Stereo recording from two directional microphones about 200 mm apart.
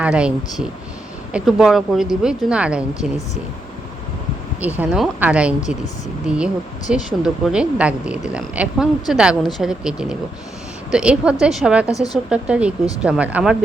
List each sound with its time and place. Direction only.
0.0 s speech: 5° right (ahead or behind)
4.6 s speech: 5° right (ahead or behind)
11.9 s speech: 15° left (ahead or behind)
12.3 s speech: 5° right (ahead or behind)